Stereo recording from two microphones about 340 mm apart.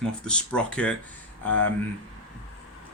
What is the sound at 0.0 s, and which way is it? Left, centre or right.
Speech, centre.